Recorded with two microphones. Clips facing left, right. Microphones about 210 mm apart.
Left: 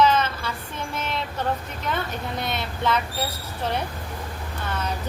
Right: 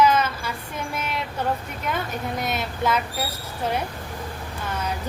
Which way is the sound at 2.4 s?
10° right (ahead or behind).